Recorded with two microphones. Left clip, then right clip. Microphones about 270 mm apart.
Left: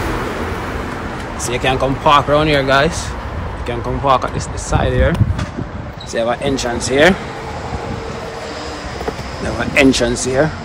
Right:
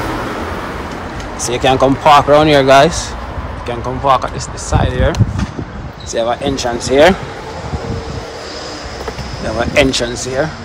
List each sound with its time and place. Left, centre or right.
1.4 s speech: centre
3.6 s speech: centre
6.1 s speech: centre
9.6 s speech: centre